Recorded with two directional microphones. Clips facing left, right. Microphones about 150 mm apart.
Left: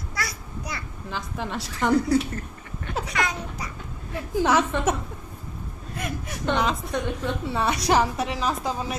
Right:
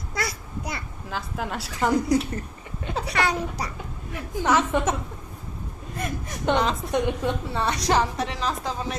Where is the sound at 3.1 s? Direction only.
35° right (ahead or behind).